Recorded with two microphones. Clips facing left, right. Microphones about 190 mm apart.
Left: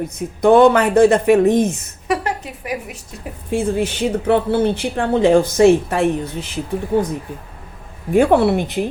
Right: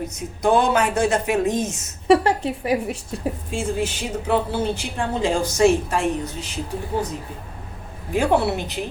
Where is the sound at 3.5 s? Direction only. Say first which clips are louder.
Left 8 dB; 60° left (ahead or behind).